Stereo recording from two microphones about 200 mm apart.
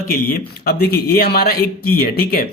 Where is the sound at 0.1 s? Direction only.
45° left (ahead or behind).